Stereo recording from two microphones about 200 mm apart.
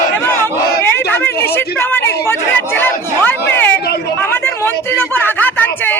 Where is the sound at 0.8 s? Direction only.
10° left (ahead or behind).